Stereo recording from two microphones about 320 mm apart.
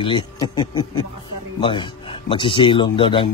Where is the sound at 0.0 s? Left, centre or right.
Centre.